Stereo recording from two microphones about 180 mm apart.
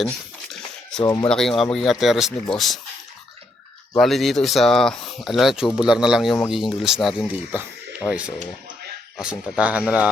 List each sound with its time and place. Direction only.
1.0 s speech: 20° left (ahead or behind)
1.3 s speech: centre (ahead or behind)
3.9 s speech: centre (ahead or behind)